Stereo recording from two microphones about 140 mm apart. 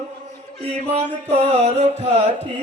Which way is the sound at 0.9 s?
50° right (ahead or behind).